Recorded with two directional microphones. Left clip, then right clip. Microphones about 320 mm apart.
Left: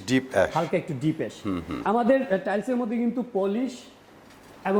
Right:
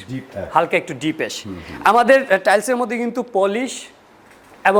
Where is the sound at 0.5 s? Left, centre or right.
Centre.